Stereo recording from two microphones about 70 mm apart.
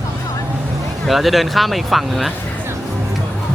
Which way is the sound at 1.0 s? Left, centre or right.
Centre.